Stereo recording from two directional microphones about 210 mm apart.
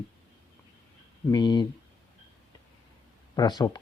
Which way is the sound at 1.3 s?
20° left (ahead or behind).